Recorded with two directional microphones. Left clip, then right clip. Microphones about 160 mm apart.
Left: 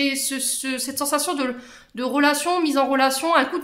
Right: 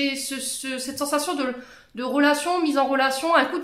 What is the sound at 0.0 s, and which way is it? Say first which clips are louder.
Speech: left 3 dB; 30° left (ahead or behind).